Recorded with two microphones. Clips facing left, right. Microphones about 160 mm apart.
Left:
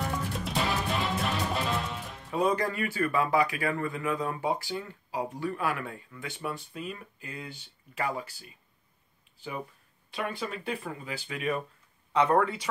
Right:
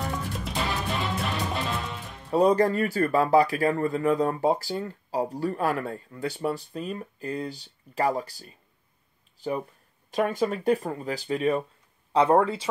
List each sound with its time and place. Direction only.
0.4 s music: centre (ahead or behind)
2.3 s speech: 35° right (ahead or behind)
10.1 s speech: 45° right (ahead or behind); by 12.6 s 30° right (ahead or behind)